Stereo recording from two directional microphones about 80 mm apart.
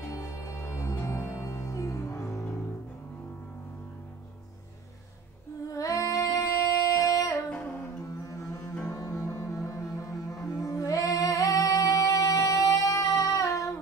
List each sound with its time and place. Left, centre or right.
0.1 s music: left
5.7 s female singing: left
8.0 s music: left